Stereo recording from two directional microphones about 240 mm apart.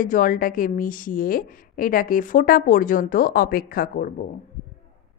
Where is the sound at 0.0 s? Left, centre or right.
Left.